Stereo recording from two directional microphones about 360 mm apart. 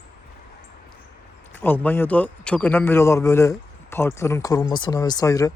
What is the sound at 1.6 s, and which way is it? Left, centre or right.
A man's voice, centre.